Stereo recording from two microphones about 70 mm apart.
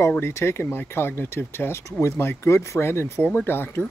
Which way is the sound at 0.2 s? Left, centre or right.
Left.